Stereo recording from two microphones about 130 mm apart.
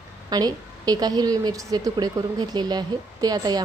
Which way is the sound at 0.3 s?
30° right (ahead or behind).